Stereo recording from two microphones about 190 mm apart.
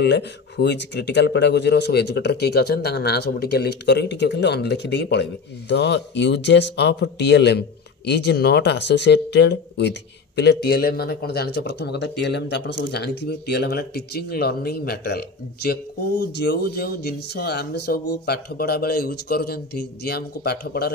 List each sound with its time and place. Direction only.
0.0 s speech: 65° left (ahead or behind)